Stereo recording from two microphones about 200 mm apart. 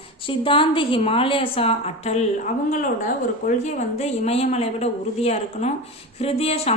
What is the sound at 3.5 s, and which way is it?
A woman's voice, 35° left (ahead or behind).